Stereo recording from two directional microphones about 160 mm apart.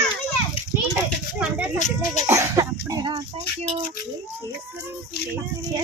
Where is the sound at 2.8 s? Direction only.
25° right (ahead or behind).